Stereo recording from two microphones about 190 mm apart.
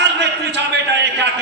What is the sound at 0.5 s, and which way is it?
Speech, 65° right (ahead or behind).